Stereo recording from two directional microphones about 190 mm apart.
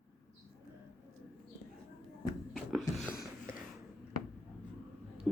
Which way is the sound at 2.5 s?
Centre (ahead or behind).